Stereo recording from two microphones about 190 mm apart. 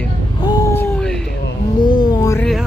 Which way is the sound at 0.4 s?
20° left (ahead or behind).